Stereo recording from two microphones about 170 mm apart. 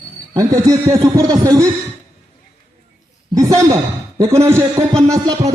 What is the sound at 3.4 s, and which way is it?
A man's voice, 20° right (ahead or behind).